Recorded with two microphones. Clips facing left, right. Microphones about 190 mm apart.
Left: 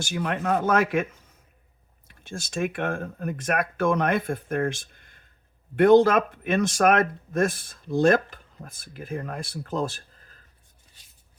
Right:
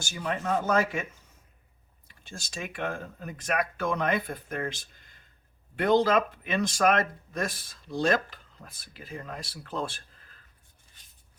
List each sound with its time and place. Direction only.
0.0 s speech: 60° left (ahead or behind)
2.0 s speech: 50° left (ahead or behind)